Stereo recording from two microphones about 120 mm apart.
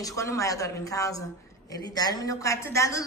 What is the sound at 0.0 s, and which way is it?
A woman's voice, 25° left (ahead or behind).